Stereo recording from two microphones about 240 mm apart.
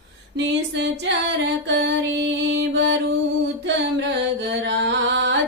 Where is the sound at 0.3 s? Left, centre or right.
Right.